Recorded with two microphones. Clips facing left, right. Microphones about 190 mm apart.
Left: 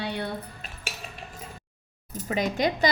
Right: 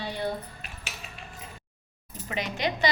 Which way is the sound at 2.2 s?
45° left (ahead or behind).